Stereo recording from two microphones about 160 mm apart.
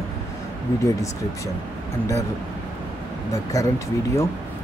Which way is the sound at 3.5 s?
20° left (ahead or behind).